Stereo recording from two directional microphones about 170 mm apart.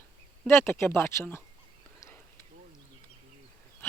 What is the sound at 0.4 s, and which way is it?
Speech, 15° left (ahead or behind).